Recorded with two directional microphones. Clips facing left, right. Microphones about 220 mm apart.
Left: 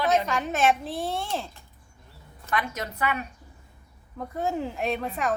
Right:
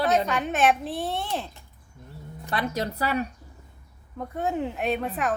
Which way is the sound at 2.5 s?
35° right (ahead or behind).